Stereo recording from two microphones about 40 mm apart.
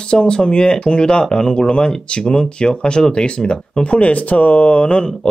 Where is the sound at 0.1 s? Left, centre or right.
Left.